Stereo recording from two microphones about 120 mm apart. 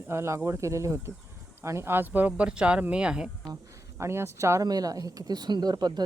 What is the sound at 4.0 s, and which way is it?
Speech, 20° right (ahead or behind).